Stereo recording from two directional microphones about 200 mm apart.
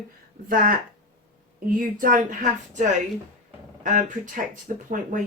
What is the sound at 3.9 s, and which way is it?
Speech, 40° right (ahead or behind).